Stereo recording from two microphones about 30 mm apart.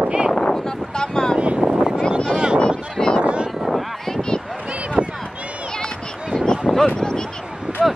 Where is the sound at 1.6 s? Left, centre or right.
Right.